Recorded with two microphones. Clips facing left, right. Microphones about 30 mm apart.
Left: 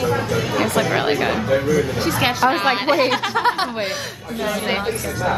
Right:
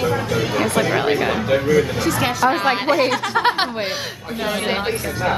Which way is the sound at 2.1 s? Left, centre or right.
Centre.